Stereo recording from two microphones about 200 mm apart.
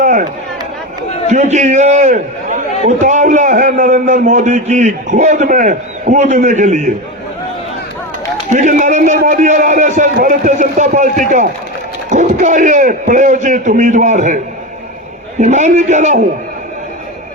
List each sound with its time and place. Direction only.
0.0 s a sound: 40° right (ahead or behind)
1.3 s a man's voice: 35° right (ahead or behind)
8.4 s a man's voice: 40° right (ahead or behind)
15.4 s a man's voice: 35° right (ahead or behind)